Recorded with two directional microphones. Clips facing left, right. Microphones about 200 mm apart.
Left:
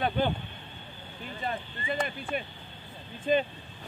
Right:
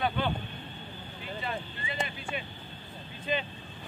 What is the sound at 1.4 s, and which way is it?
Speech, 50° left (ahead or behind).